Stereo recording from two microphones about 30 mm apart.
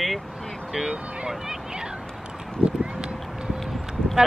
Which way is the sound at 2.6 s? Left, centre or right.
Right.